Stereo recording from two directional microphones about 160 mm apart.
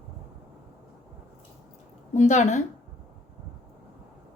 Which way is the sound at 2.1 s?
50° left (ahead or behind).